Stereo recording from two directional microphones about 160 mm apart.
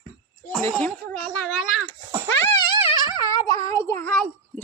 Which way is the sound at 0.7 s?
5° left (ahead or behind).